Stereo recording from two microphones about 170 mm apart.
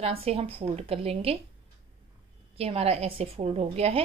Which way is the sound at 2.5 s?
35° right (ahead or behind).